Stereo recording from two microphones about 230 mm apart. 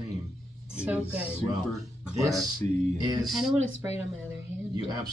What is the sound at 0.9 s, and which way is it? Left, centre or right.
Speech, centre.